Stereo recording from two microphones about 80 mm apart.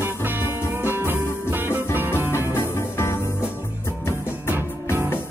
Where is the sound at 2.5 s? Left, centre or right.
Left.